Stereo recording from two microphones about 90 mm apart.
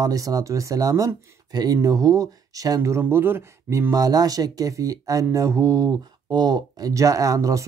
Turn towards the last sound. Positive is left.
turn(degrees=-40)  # may be behind; listen again after turning